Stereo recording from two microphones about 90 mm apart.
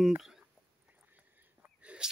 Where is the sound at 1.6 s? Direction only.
15° right (ahead or behind).